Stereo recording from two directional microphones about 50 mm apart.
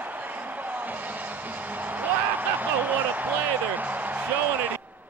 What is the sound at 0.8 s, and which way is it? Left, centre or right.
Music, right.